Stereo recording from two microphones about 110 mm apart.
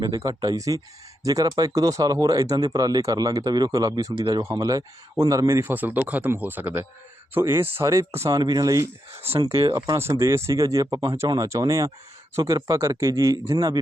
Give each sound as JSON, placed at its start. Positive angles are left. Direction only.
{"t": 0.0, "sound": "speech", "side_deg": -35}
{"t": 8.4, "sound": "speech", "side_deg": -40}
{"t": 9.1, "sound": "speech", "side_deg": -65}
{"t": 9.7, "sound": "speech", "side_deg": -30}